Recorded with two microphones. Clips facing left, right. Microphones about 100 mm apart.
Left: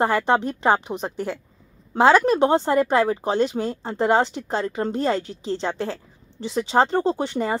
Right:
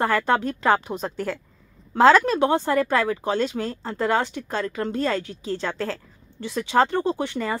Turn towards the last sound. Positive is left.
turn(degrees=25)  # may be behind; listen again after turning